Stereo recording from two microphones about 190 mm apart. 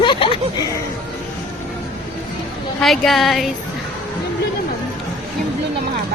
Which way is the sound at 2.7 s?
Centre (ahead or behind).